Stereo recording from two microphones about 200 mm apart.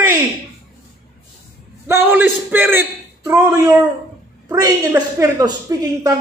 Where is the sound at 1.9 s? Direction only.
10° right (ahead or behind).